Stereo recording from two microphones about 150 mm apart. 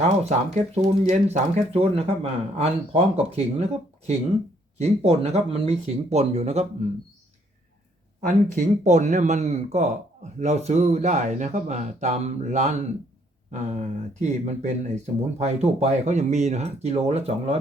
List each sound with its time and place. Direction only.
0.0 s speech: 50° right (ahead or behind)
8.2 s speech: 55° right (ahead or behind)